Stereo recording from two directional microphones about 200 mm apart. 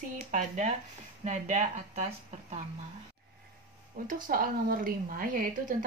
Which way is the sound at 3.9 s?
40° right (ahead or behind).